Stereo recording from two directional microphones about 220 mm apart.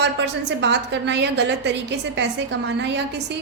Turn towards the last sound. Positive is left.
turn(degrees=-50)  # may be behind; listen again after turning